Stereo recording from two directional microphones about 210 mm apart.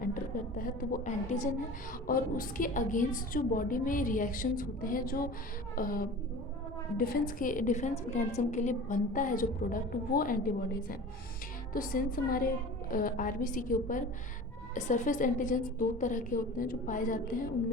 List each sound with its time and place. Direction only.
0.1 s a woman's voice: 40° left (ahead or behind)
11.7 s a woman's voice: 40° left (ahead or behind)